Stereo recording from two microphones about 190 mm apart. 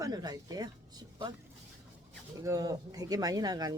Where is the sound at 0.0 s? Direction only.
20° right (ahead or behind).